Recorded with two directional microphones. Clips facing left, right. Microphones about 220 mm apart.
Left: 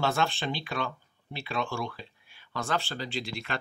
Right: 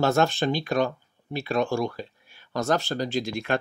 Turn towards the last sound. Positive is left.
turn(degrees=-45)  # may be behind; listen again after turning